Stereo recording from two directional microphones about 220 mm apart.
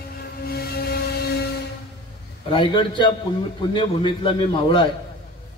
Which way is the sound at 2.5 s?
20° left (ahead or behind).